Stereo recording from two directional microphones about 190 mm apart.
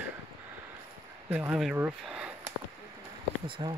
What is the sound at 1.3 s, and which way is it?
Speech, 5° right (ahead or behind).